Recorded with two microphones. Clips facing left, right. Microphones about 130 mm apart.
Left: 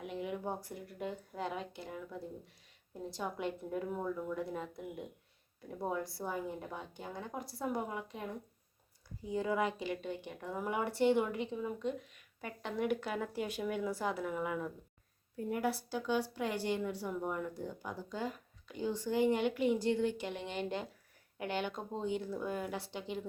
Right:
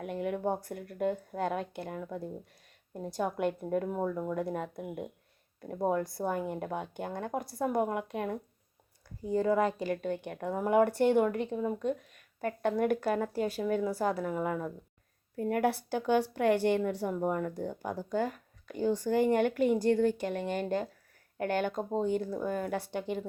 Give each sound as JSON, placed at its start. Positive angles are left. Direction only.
{"t": 0.0, "sound": "a woman's voice", "side_deg": -55}
{"t": 9.2, "sound": "a woman's voice", "side_deg": -45}
{"t": 15.4, "sound": "a woman's voice", "side_deg": -65}